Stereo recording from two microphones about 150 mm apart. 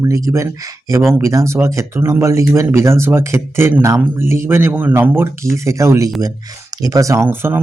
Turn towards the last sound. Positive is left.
turn(degrees=-15)  # may be behind; listen again after turning